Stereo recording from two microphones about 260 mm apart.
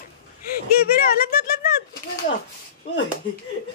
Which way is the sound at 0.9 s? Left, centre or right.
Left.